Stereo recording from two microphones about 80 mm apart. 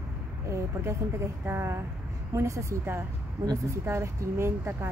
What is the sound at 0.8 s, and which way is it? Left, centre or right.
Speech, right.